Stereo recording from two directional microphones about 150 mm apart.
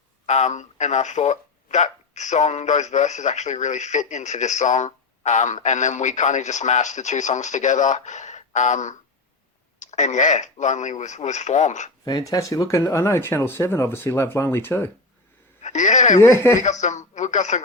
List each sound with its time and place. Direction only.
0.3 s speech: 50° left (ahead or behind)
12.0 s speech: 25° left (ahead or behind)
15.6 s speech: 50° left (ahead or behind)
16.2 s speech: 15° left (ahead or behind)
16.6 s speech: 50° left (ahead or behind)